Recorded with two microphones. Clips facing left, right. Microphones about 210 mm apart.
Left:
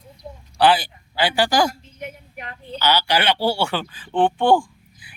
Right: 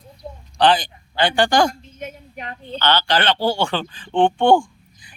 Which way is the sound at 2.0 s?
20° right (ahead or behind).